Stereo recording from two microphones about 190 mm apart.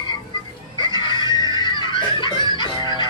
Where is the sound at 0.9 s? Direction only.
25° left (ahead or behind).